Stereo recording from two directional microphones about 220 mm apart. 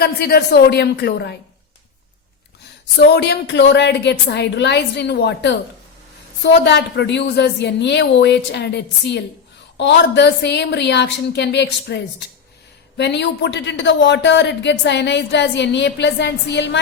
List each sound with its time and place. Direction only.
0.0 s a woman's voice: 45° left (ahead or behind)
2.9 s a woman's voice: 50° left (ahead or behind)
13.0 s a woman's voice: 50° left (ahead or behind)